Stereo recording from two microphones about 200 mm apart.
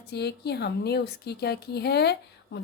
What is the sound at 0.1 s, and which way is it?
A woman's voice, 55° left (ahead or behind).